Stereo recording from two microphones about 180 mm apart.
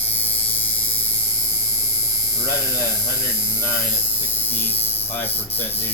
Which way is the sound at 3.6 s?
10° left (ahead or behind).